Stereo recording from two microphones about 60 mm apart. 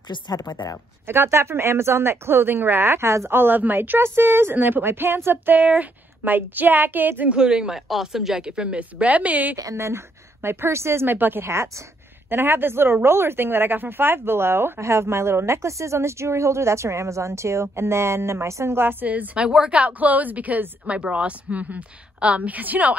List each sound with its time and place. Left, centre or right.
0.3 s speech: left
1.0 s speech: right
7.3 s a woman's voice: centre
9.8 s a woman's voice: right
11.1 s speech: right
11.4 s speech: right
12.3 s speech: right
19.4 s a woman's voice: centre